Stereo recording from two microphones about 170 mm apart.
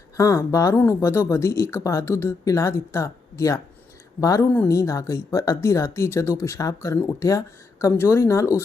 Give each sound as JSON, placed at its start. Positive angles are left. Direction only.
{"t": 0.2, "sound": "a woman's voice", "side_deg": 20}